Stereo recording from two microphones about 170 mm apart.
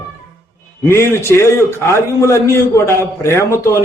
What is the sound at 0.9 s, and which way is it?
A man's voice, 15° left (ahead or behind).